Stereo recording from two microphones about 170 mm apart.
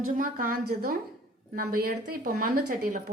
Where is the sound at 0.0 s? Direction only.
55° right (ahead or behind).